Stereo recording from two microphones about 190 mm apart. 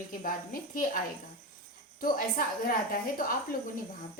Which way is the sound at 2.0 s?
50° left (ahead or behind).